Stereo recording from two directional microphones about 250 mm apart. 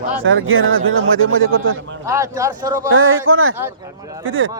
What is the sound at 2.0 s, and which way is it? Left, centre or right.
Speech, centre.